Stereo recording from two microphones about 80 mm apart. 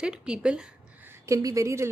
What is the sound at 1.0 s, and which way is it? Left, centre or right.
Speech, right.